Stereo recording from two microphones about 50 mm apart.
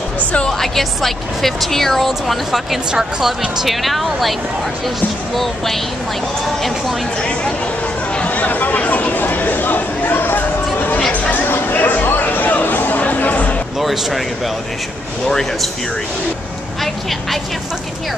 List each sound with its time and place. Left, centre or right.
0.5 s speech: centre
7.2 s speech: left
8.3 s a sound: left
11.0 s chatter: left
11.3 s a sound: left
13.0 s music: left
13.7 s speech: centre
15.2 s speech: centre
16.8 s speech: centre